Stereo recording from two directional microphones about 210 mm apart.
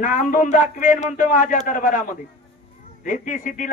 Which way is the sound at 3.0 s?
40° left (ahead or behind).